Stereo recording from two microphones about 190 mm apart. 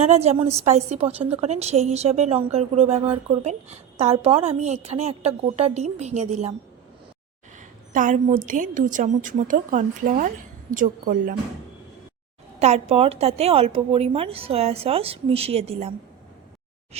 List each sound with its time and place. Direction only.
0.0 s a woman's voice: 35° right (ahead or behind)
7.9 s a woman's voice: 45° right (ahead or behind)
12.5 s a woman's voice: 35° right (ahead or behind)